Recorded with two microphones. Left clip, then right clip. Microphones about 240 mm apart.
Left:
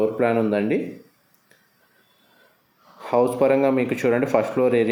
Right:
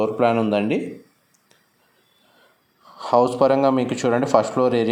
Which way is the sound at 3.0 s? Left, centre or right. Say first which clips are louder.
Right 2 dB; centre.